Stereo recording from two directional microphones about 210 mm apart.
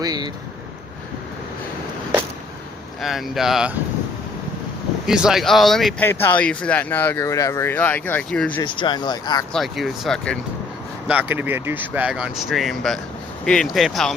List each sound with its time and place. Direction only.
0.0 s speech: 20° right (ahead or behind)
3.0 s speech: centre (ahead or behind)
5.0 s speech: 5° right (ahead or behind)
8.6 s speech: 20° left (ahead or behind)
9.5 s speech: centre (ahead or behind)
11.1 s speech: 10° right (ahead or behind)